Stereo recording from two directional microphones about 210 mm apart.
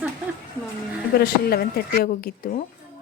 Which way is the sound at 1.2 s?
45° left (ahead or behind).